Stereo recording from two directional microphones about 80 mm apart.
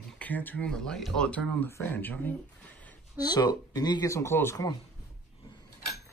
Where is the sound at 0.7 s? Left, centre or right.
Centre.